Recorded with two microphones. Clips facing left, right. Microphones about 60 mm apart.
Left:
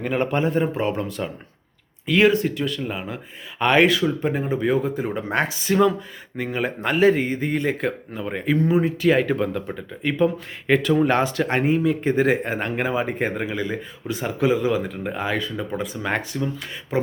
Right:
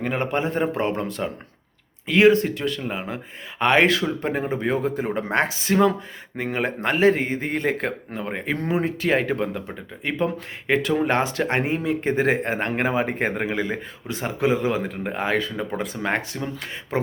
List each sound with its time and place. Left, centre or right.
0.0 s speech: right
0.8 s speech: right
2.0 s speech: right
2.3 s speech: right; by 11.1 s centre
11.1 s speech: right
15.8 s speech: right
16.0 s speech: right